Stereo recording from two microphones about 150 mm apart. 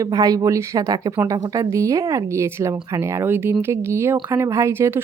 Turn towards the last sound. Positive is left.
turn(degrees=-15)  # may be behind; listen again after turning